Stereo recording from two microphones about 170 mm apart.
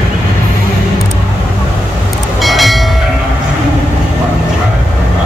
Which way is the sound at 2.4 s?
Centre (ahead or behind).